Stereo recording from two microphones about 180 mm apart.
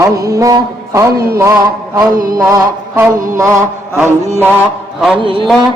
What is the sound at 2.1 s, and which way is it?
Mantra, 50° right (ahead or behind).